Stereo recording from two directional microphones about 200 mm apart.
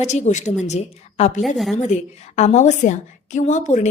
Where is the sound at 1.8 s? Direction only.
35° left (ahead or behind).